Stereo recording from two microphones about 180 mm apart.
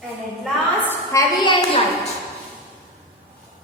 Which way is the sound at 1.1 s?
25° left (ahead or behind).